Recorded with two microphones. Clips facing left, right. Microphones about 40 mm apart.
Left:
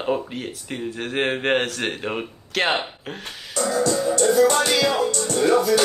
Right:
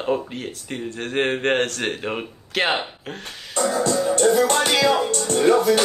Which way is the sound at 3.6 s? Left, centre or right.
Right.